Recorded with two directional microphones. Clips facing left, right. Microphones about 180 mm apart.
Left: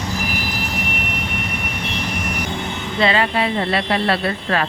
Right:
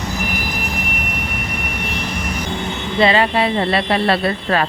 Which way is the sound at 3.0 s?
35° right (ahead or behind).